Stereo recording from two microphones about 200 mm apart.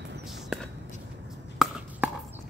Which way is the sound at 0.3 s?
Centre (ahead or behind).